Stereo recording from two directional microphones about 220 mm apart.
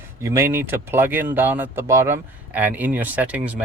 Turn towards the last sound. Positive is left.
turn(degrees=-5)  # may be behind; listen again after turning